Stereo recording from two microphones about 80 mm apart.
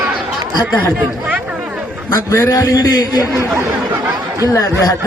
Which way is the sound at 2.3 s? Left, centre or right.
Left.